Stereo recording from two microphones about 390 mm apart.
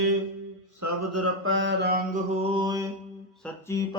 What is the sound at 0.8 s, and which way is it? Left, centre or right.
Mantra, right.